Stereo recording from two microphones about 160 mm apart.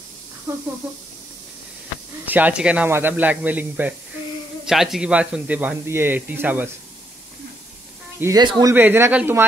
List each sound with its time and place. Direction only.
2.2 s speech: 10° right (ahead or behind)
8.2 s speech: 25° right (ahead or behind)
8.7 s speech: 15° right (ahead or behind)